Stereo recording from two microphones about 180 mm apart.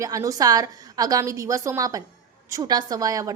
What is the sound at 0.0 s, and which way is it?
A woman's voice, 20° right (ahead or behind).